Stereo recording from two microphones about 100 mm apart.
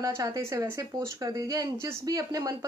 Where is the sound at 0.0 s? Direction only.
35° right (ahead or behind).